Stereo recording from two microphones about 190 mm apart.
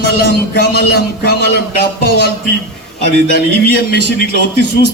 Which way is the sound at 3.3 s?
55° left (ahead or behind).